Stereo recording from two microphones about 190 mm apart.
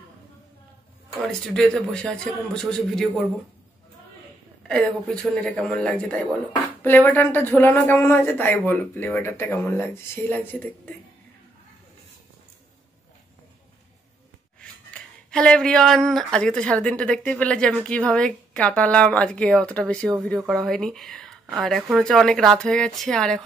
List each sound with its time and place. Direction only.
1.2 s speech: 5° left (ahead or behind)
4.6 s speech: 5° left (ahead or behind)
14.6 s speech: 5° left (ahead or behind)